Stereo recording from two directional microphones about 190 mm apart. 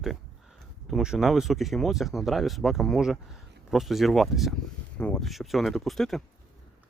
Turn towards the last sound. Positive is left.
turn(degrees=0)  # may be behind; listen again after turning